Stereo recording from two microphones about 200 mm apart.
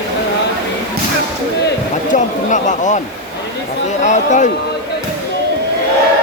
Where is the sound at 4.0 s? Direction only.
35° left (ahead or behind).